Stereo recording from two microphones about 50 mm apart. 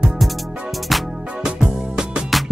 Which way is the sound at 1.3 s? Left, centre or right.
Centre.